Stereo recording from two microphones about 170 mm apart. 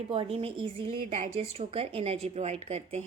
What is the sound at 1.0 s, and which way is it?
A woman's voice, 45° right (ahead or behind).